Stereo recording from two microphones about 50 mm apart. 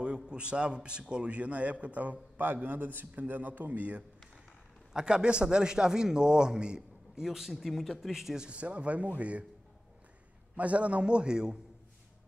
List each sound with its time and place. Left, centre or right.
0.0 s a man's voice: centre
4.9 s a man's voice: centre
8.5 s a man's voice: right
10.5 s a man's voice: right